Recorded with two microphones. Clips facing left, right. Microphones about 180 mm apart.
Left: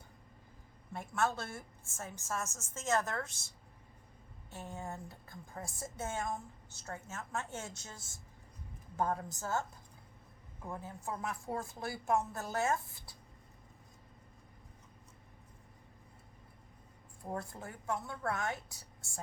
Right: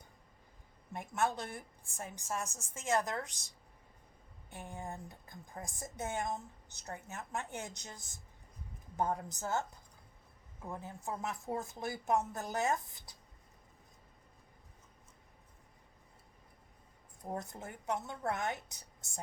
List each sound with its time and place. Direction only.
0.9 s a woman's voice: 15° right (ahead or behind)
4.5 s a woman's voice: 15° right (ahead or behind)
10.7 s a woman's voice: 20° right (ahead or behind)
17.2 s a woman's voice: 20° right (ahead or behind)